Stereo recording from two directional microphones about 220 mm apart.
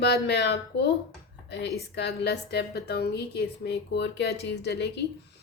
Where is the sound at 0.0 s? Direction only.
50° left (ahead or behind).